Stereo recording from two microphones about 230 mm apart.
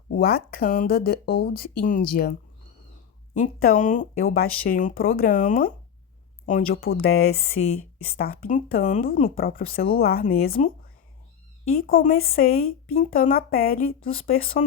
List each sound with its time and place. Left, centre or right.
0.1 s speech: left
3.4 s speech: left
7.6 s speech: left
8.0 s speech: left
11.8 s speech: left